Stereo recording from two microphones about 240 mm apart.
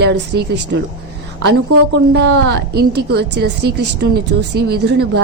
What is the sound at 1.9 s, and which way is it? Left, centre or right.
A woman's voice, right.